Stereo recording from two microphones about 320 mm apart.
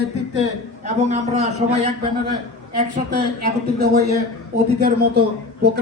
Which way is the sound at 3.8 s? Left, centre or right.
Right.